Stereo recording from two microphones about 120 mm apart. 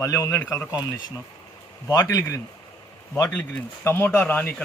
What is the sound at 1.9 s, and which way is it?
Speech, 30° left (ahead or behind).